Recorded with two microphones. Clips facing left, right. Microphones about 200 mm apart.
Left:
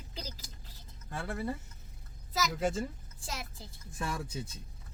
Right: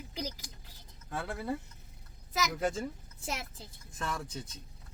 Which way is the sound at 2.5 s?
Centre (ahead or behind).